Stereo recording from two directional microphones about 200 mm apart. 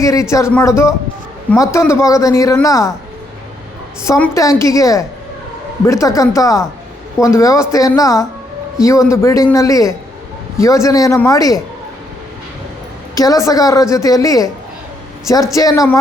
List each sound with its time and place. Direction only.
0.0 s a man's voice: 15° left (ahead or behind)
4.0 s a man's voice: 15° left (ahead or behind)
13.1 s a man's voice: 15° left (ahead or behind)
15.5 s a man's voice: 15° left (ahead or behind)